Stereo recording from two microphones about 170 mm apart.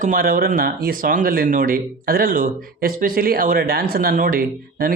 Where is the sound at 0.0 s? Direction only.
55° right (ahead or behind).